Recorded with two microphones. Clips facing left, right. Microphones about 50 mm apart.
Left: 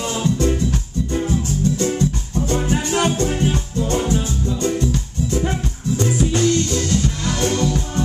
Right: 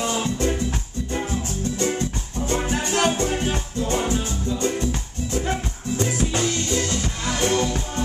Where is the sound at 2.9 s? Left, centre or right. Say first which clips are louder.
Even; centre.